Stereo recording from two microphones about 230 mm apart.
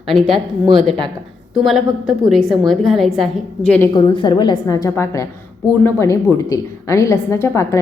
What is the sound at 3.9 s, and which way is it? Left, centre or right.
A woman's voice, centre.